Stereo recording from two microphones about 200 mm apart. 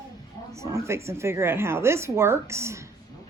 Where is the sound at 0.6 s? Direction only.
15° right (ahead or behind).